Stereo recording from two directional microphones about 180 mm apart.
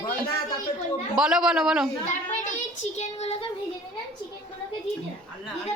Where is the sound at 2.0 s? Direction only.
40° left (ahead or behind).